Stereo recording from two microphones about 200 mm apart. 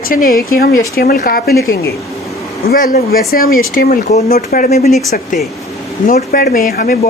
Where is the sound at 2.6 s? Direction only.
45° left (ahead or behind).